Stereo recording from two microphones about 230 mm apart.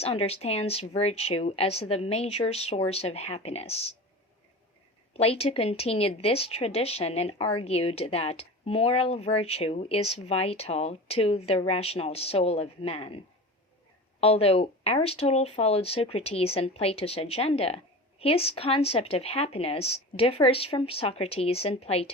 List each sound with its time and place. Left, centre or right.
0.0 s speech: left
5.1 s speech: left